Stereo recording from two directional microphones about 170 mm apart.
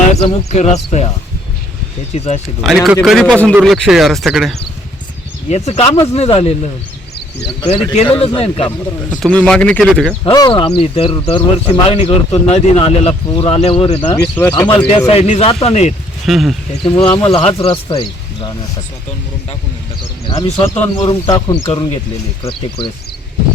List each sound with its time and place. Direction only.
0.1 s speech: 40° left (ahead or behind)
2.1 s speech: 40° left (ahead or behind)
2.6 s speech: centre (ahead or behind)
5.5 s speech: 40° left (ahead or behind)
9.0 s speech: 5° left (ahead or behind)
10.2 s speech: 25° left (ahead or behind)
16.2 s speech: centre (ahead or behind)
16.8 s speech: 35° left (ahead or behind)
20.2 s speech: 35° left (ahead or behind)
20.7 s speech: 10° left (ahead or behind)
21.2 s speech: 20° left (ahead or behind)